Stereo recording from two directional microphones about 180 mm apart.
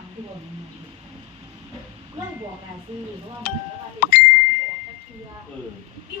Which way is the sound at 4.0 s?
55° left (ahead or behind).